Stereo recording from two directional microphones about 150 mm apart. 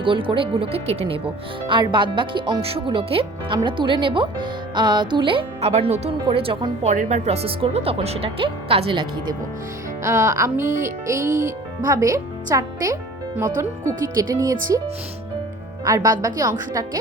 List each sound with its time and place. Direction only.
0.0 s speech: 35° right (ahead or behind)
6.8 s speech: 55° right (ahead or behind); by 9.0 s 35° right (ahead or behind)
10.0 s a child's voice: 20° right (ahead or behind)
15.8 s speech: 25° right (ahead or behind)